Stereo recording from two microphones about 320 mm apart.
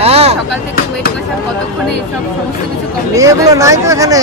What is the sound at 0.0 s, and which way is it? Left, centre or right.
Vehicle, centre.